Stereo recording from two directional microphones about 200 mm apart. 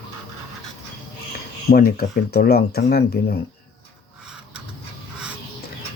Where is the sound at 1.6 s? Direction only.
50° left (ahead or behind).